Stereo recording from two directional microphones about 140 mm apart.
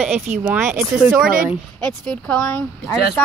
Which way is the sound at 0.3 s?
55° right (ahead or behind).